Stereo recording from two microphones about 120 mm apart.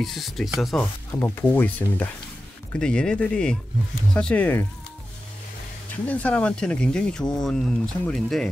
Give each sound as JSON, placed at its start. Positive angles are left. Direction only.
{"t": 0.0, "sound": "speech", "side_deg": 0}
{"t": 1.4, "sound": "speech", "side_deg": 15}
{"t": 5.9, "sound": "speech", "side_deg": 10}